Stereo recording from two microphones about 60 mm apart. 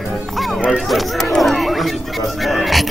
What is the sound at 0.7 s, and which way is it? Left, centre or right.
Chatter, centre.